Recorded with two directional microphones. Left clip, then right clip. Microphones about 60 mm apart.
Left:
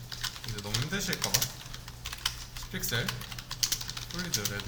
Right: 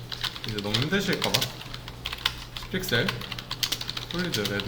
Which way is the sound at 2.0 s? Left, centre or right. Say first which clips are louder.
Right 6 dB; centre.